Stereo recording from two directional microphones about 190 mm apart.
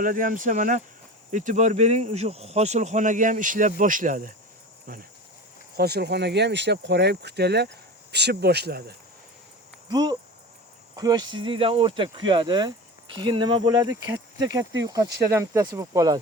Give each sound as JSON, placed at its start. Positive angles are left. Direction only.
{"t": 0.0, "sound": "speech", "side_deg": -45}
{"t": 9.9, "sound": "speech", "side_deg": -20}